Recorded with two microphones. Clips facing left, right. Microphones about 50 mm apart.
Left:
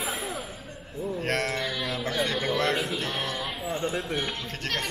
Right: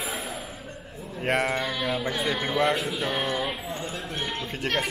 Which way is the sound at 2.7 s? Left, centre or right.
Centre.